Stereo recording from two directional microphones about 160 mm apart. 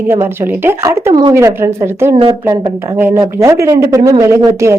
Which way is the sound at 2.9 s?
15° right (ahead or behind).